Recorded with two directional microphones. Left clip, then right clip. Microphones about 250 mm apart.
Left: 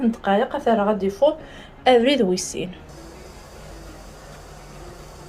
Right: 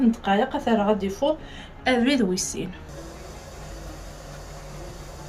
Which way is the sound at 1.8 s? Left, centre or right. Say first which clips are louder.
Left 6 dB; centre.